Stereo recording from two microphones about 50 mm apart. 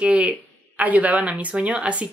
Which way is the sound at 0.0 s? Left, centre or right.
Right.